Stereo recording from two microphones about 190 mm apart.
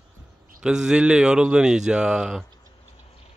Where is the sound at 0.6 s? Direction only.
5° right (ahead or behind).